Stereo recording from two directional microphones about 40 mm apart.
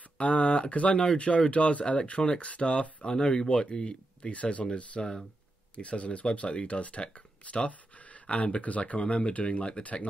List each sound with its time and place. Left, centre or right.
0.2 s speech: left
4.3 s speech: left
5.0 s speech: centre
5.8 s speech: left